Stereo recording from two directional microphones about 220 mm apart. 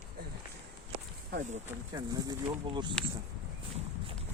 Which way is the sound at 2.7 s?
20° right (ahead or behind).